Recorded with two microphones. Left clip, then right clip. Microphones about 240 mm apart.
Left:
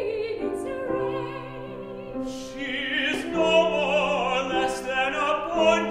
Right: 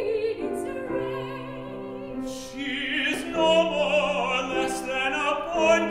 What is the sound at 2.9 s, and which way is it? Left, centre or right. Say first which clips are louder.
Opera: left 1 dB; right.